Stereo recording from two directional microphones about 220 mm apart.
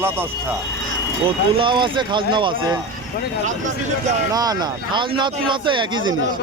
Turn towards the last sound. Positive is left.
turn(degrees=-20)  # may be behind; listen again after turning